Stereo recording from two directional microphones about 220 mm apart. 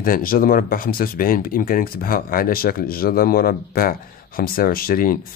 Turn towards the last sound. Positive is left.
turn(degrees=40)  # may be behind; listen again after turning